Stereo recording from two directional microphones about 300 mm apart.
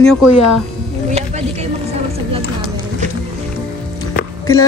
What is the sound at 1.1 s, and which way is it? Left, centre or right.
Speech, right.